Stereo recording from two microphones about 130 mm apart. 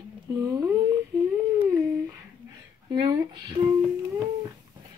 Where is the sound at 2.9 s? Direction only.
35° right (ahead or behind).